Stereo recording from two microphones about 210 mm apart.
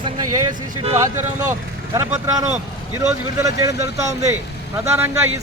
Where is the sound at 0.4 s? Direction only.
25° right (ahead or behind).